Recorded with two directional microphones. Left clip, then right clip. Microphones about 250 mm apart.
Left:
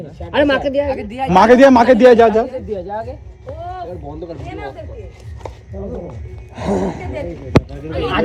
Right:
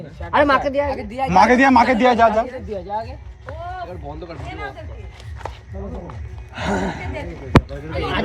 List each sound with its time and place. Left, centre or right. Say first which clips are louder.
0.3 s a woman's voice: left 1 dB; centre
1.3 s a man's voice: left 5 dB; centre
2.1 s a man's voice: left 4 dB; left
2.5 s a woman's voice: left 5 dB; centre
3.6 s a sound: left 2 dB; centre
4.1 s speech: left 4 dB; right
4.4 s a woman's voice: left 2 dB; centre
6.6 s a woman's voice: left 3 dB; centre